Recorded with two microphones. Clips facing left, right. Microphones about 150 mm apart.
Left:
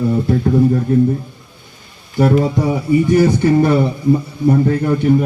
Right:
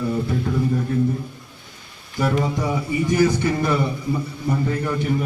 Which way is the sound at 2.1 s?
35° left (ahead or behind).